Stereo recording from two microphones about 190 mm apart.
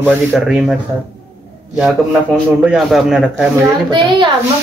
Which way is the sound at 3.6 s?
20° right (ahead or behind).